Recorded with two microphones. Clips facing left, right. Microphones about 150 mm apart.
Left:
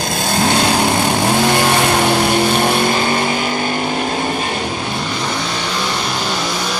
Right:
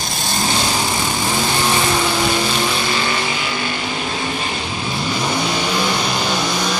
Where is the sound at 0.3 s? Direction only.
60° left (ahead or behind).